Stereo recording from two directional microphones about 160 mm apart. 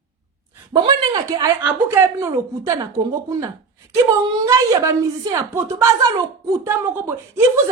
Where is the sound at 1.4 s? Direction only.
15° right (ahead or behind).